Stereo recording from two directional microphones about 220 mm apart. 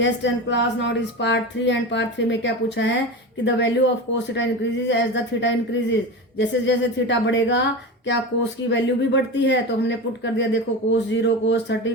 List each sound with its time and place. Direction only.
0.0 s a woman's voice: 55° left (ahead or behind)
8.7 s a woman's voice: 55° left (ahead or behind)